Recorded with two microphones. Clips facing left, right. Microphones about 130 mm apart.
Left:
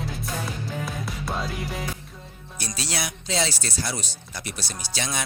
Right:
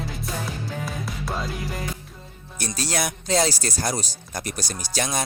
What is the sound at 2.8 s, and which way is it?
Speech, 45° right (ahead or behind).